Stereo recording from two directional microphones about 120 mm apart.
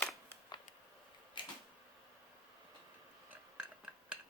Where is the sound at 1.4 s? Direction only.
40° left (ahead or behind).